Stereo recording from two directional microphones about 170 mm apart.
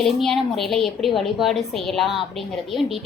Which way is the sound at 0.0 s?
Centre (ahead or behind).